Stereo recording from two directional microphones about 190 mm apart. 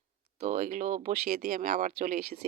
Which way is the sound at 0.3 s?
40° right (ahead or behind).